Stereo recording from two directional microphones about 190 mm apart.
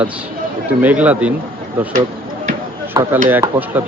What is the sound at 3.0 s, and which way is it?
Speech, 20° right (ahead or behind).